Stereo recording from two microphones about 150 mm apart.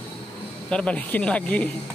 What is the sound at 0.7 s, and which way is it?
Speech, 5° left (ahead or behind).